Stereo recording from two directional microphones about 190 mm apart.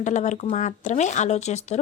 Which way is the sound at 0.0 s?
40° left (ahead or behind).